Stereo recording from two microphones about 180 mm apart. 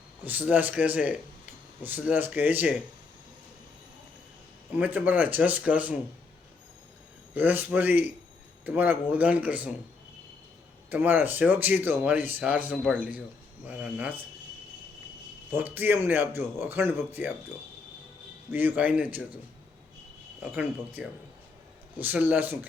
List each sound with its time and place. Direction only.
0.3 s speech: 10° right (ahead or behind)
4.7 s speech: 10° right (ahead or behind)
7.3 s speech: 10° right (ahead or behind)
10.8 s speech: 10° right (ahead or behind)
15.5 s speech: 10° right (ahead or behind)
18.5 s speech: 10° right (ahead or behind)
20.4 s speech: 10° right (ahead or behind)